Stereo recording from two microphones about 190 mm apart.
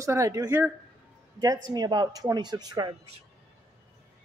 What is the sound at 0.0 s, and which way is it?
Speech, 15° right (ahead or behind).